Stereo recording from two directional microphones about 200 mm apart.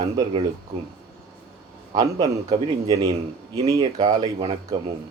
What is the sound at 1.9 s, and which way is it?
Speech, 20° right (ahead or behind).